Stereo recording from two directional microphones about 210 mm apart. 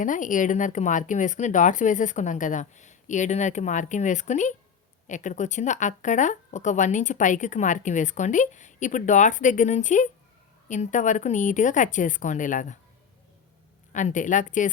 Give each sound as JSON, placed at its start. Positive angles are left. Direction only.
{"t": 0.0, "sound": "speech", "side_deg": 40}
{"t": 13.9, "sound": "speech", "side_deg": 35}